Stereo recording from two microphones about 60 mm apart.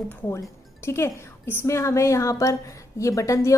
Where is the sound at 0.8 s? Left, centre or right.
Left.